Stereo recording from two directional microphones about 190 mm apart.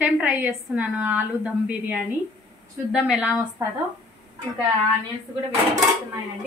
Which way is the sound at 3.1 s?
5° right (ahead or behind).